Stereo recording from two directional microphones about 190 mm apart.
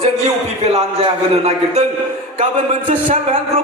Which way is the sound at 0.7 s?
30° right (ahead or behind).